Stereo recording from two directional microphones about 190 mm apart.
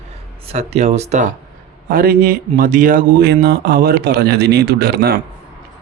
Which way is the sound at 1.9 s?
50° right (ahead or behind).